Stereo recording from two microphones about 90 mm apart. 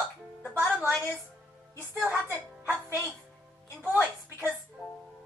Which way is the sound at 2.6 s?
30° right (ahead or behind).